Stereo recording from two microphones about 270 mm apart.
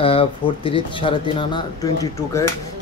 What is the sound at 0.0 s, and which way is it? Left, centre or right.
Speech, centre.